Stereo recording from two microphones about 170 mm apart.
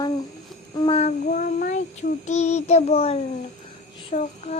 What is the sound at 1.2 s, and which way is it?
Child singing, 60° left (ahead or behind).